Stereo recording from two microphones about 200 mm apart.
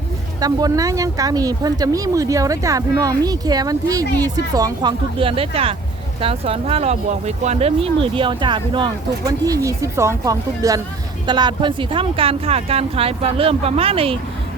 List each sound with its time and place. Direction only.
0.3 s speech: 20° right (ahead or behind)